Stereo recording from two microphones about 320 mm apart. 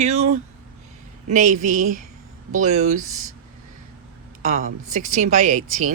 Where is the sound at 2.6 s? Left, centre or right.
Right.